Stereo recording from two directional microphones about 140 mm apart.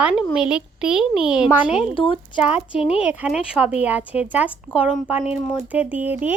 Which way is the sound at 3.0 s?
10° right (ahead or behind).